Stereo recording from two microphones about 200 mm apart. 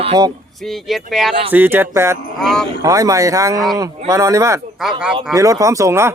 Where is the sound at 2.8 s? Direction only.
15° right (ahead or behind).